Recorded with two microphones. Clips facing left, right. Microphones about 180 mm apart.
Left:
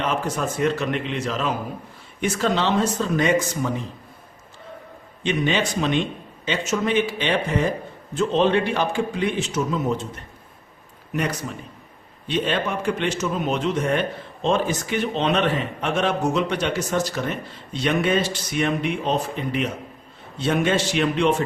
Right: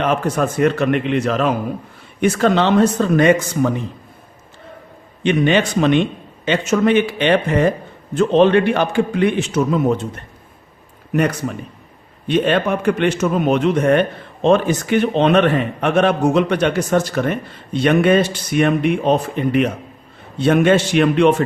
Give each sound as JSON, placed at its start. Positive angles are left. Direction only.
{"t": 0.0, "sound": "a man's voice", "side_deg": -60}
{"t": 5.2, "sound": "a man's voice", "side_deg": -60}